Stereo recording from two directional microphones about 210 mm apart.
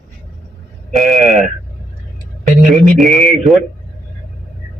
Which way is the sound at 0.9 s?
Centre (ahead or behind).